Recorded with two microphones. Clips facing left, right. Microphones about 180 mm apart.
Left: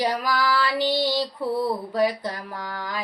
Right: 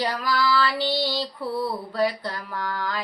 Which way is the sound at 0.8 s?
45° left (ahead or behind).